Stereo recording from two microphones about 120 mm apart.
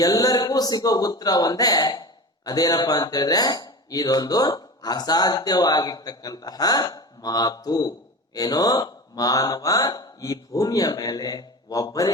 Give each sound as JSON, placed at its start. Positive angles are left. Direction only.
{"t": 0.0, "sound": "speech", "side_deg": 30}